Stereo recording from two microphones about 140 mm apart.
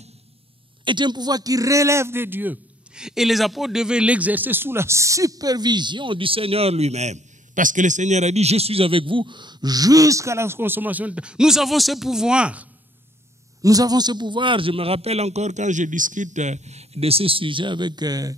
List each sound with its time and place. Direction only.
0.8 s speech: 35° right (ahead or behind); by 12.6 s 10° right (ahead or behind)
13.6 s a man's voice: 25° right (ahead or behind)